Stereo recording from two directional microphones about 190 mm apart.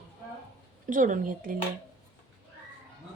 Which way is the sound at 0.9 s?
45° right (ahead or behind).